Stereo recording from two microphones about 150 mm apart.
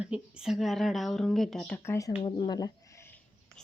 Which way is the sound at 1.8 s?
20° left (ahead or behind).